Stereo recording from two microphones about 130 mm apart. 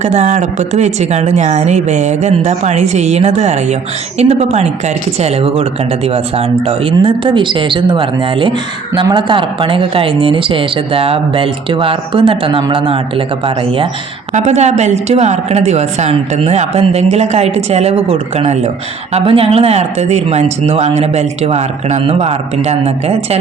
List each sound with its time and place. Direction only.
0.0 s a woman's voice: 60° right (ahead or behind); by 13.8 s 45° right (ahead or behind)
14.3 s speech: 60° right (ahead or behind)